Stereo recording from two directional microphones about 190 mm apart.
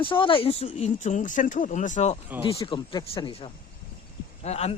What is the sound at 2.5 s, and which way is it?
Speech, 25° left (ahead or behind).